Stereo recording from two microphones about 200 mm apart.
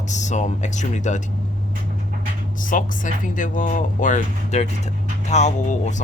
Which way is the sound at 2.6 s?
40° left (ahead or behind).